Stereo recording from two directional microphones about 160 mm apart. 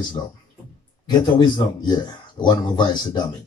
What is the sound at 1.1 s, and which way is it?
Speech, 25° left (ahead or behind).